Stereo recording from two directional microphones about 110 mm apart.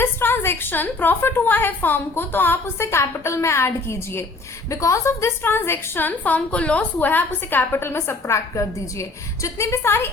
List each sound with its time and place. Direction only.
0.0 s a woman's voice: 20° left (ahead or behind)